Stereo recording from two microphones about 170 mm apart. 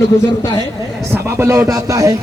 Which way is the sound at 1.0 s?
15° right (ahead or behind).